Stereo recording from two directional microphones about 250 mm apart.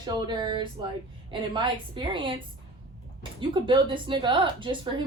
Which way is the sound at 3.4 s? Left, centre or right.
Centre.